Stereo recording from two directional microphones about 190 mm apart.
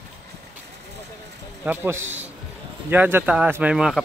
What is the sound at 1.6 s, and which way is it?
Speech, 10° right (ahead or behind).